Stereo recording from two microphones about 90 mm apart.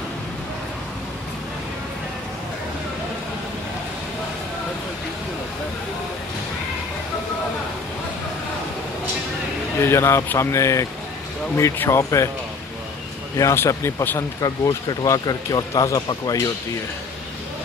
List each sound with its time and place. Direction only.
9.8 s speech: 30° left (ahead or behind)
13.4 s speech: 35° left (ahead or behind)